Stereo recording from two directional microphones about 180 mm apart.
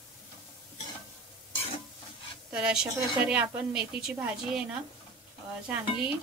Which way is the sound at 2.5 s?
5° right (ahead or behind).